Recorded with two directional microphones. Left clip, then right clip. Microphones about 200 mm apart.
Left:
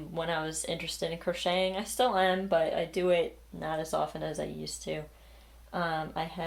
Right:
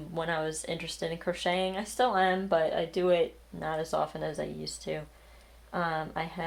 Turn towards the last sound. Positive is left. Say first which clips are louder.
# even
turn(degrees=-5)  # may be behind; listen again after turning